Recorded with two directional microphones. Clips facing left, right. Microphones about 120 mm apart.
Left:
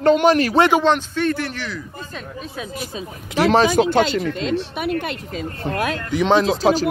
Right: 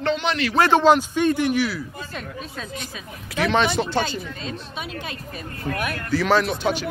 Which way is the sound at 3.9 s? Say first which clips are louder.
Left 7 dB; 70° left (ahead or behind).